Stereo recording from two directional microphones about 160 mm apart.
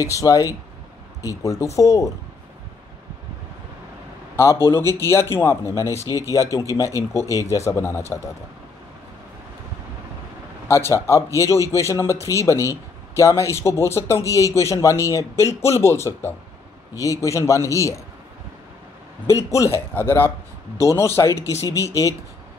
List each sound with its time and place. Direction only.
0.0 s a man's voice: 20° left (ahead or behind)
4.4 s speech: 15° left (ahead or behind)
6.0 s speech: 20° right (ahead or behind)
6.3 s a man's voice: 20° left (ahead or behind)
10.7 s a man's voice: 15° left (ahead or behind)
19.5 s speech: 20° left (ahead or behind)